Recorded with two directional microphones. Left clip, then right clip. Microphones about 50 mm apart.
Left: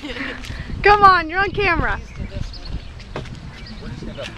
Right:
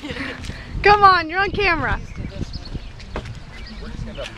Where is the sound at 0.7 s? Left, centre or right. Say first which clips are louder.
Left 1 dB; centre.